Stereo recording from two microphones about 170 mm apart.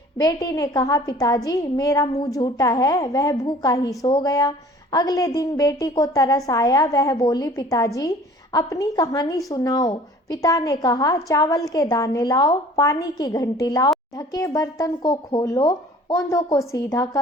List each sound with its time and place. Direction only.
0.2 s a woman's voice: 20° left (ahead or behind)